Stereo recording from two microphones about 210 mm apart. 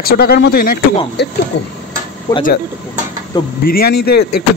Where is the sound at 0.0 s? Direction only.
45° left (ahead or behind).